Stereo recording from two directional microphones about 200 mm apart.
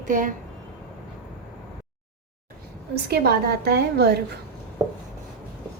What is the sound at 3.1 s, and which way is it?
A woman's voice, 55° right (ahead or behind).